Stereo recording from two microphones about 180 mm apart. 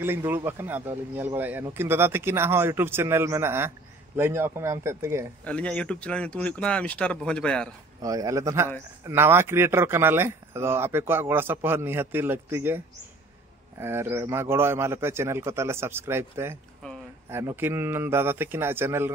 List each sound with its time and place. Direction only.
0.0 s speech: 10° right (ahead or behind)
5.4 s speech: 5° left (ahead or behind)
8.0 s a man's voice: 20° right (ahead or behind)